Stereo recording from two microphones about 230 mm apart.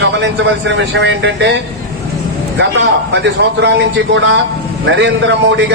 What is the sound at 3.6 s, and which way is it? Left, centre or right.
A man's voice, right.